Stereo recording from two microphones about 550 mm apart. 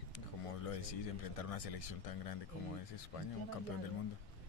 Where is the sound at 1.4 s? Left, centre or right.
Left.